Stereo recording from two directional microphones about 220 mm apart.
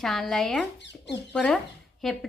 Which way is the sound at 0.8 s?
50° left (ahead or behind).